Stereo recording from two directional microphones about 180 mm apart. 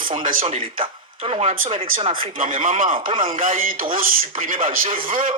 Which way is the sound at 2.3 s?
45° right (ahead or behind).